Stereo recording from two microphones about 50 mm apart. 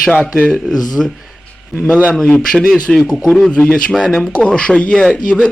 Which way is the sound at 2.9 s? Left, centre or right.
Centre.